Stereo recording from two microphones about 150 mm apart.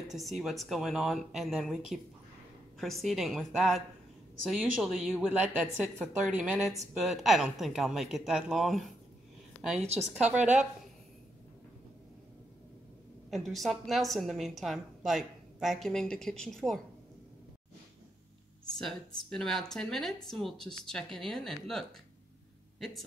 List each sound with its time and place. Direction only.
0.1 s a woman's voice: centre (ahead or behind)
2.8 s a woman's voice: centre (ahead or behind)
9.8 s a woman's voice: 45° right (ahead or behind)
13.3 s a woman's voice: centre (ahead or behind)
18.7 s a woman's voice: 5° left (ahead or behind)